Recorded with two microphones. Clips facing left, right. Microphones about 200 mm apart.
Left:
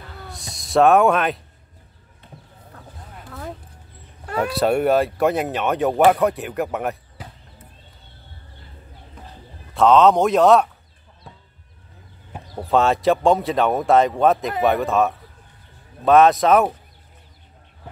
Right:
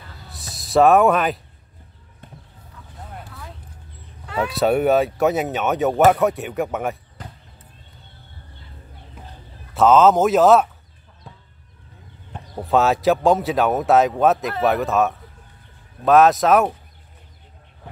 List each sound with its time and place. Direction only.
0.4 s speech: centre (ahead or behind)
4.4 s speech: centre (ahead or behind)
9.2 s bird: 5° right (ahead or behind)
9.8 s speech: centre (ahead or behind)
11.3 s chicken: centre (ahead or behind)
12.3 s speech: centre (ahead or behind)